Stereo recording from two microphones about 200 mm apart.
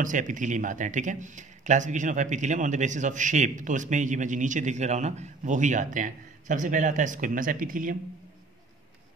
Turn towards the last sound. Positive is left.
turn(degrees=-45)  # may be behind; listen again after turning